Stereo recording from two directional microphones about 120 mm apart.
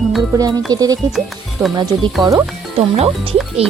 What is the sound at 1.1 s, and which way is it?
Speech, centre (ahead or behind).